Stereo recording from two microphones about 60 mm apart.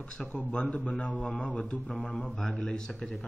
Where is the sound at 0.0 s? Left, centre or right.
Centre.